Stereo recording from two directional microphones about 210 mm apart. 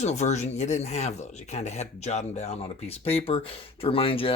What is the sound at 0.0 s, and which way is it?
Speech, 35° left (ahead or behind).